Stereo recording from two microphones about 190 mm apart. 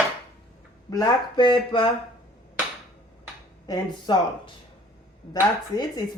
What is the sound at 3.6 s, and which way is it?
Speech, 25° left (ahead or behind).